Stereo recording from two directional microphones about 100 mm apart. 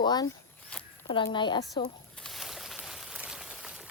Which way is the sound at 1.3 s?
50° left (ahead or behind).